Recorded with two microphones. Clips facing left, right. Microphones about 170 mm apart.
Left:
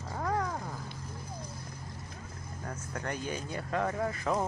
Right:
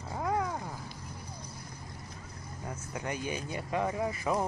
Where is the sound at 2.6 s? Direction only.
10° right (ahead or behind).